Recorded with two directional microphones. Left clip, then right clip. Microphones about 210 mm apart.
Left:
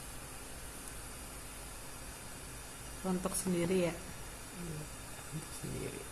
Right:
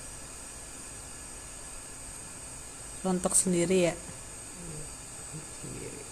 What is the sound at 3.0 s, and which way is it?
Speech, 40° right (ahead or behind).